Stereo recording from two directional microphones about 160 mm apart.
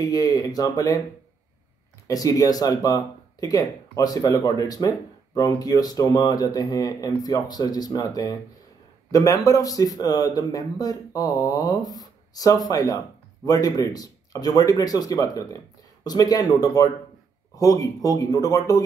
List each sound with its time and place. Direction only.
0.0 s speech: 25° left (ahead or behind)
2.0 s speech: 20° left (ahead or behind)